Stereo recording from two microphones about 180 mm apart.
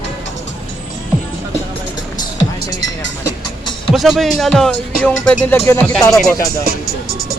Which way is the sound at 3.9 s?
Centre (ahead or behind).